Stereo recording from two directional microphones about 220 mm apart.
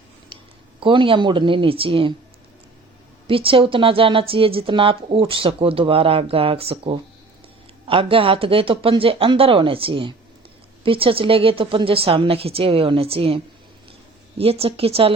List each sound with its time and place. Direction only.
0.3 s a sound: 20° right (ahead or behind)
0.8 s a woman's voice: 25° right (ahead or behind)
3.2 s a woman's voice: 25° right (ahead or behind)